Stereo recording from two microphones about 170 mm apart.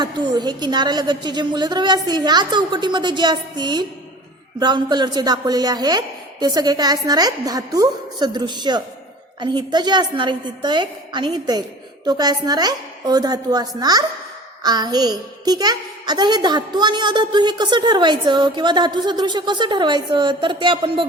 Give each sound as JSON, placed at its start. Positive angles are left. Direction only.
{"t": 0.0, "sound": "a child's voice", "side_deg": -25}